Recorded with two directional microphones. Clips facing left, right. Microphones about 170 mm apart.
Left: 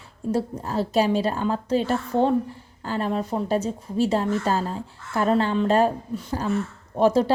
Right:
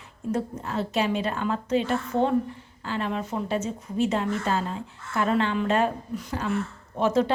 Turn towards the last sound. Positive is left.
turn(degrees=35)  # may be behind; listen again after turning